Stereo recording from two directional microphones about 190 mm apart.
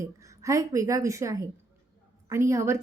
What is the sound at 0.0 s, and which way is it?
Speech, 15° right (ahead or behind).